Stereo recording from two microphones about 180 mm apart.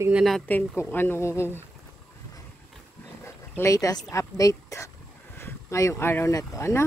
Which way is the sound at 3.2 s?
15° left (ahead or behind).